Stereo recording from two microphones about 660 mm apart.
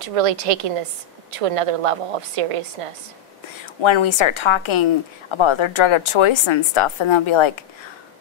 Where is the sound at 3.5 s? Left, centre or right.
Left.